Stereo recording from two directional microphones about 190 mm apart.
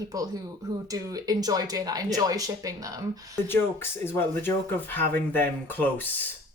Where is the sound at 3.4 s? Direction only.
10° left (ahead or behind).